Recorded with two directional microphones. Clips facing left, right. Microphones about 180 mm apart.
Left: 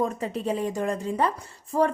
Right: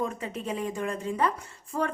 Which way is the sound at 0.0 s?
35° left (ahead or behind).